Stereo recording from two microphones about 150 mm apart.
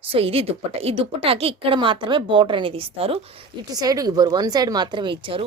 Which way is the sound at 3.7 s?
25° right (ahead or behind).